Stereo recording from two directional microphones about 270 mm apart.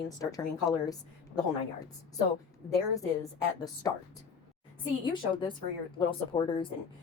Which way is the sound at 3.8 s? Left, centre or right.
Centre.